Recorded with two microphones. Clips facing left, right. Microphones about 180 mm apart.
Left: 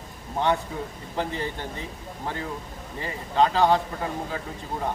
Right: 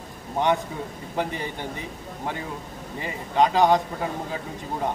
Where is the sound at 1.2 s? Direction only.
15° right (ahead or behind).